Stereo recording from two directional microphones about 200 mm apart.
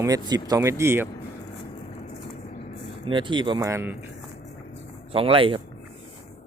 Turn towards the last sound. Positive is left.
turn(degrees=-25)  # may be behind; listen again after turning